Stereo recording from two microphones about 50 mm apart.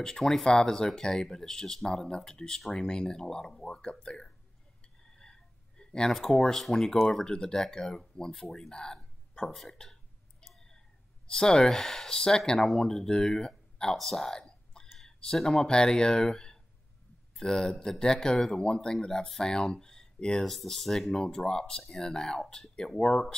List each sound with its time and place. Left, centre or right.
0.0 s speech: centre
5.1 s a sound: centre
6.1 s speech: centre
11.2 s speech: centre
13.9 s a sound: centre
15.3 s speech: centre
20.4 s speech: centre
21.1 s speech: centre